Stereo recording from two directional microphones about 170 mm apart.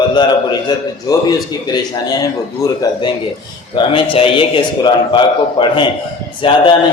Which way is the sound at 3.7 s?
30° left (ahead or behind).